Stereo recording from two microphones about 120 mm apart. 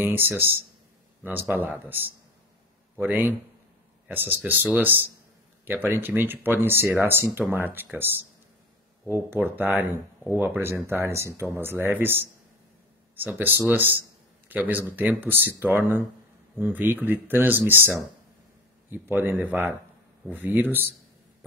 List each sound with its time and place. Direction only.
0.0 s speech: 15° right (ahead or behind)